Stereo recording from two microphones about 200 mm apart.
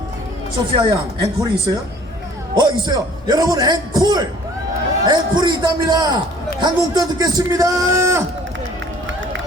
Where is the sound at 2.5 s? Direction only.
20° right (ahead or behind).